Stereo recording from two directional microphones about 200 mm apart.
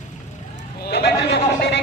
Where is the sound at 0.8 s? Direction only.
55° left (ahead or behind).